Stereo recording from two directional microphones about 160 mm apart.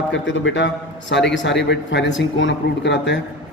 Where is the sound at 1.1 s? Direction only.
90° left.